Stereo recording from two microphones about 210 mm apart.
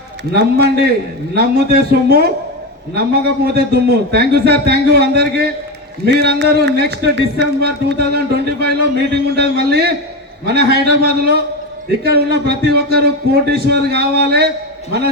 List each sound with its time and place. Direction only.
0.3 s a man's voice: 50° right (ahead or behind)